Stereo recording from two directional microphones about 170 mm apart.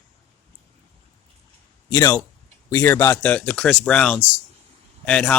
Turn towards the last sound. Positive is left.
turn(degrees=5)  # may be behind; listen again after turning